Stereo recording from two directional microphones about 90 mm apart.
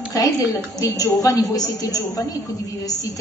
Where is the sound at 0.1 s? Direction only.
45° left (ahead or behind).